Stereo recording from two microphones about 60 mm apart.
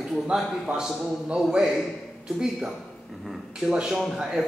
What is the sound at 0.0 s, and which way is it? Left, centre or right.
Speech, centre.